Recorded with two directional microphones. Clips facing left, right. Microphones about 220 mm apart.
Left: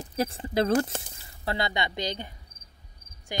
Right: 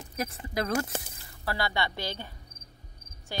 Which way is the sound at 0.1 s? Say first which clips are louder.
Left 6 dB; 30° left (ahead or behind).